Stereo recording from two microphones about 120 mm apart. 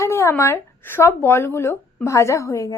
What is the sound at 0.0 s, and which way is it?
A woman's voice, 25° left (ahead or behind).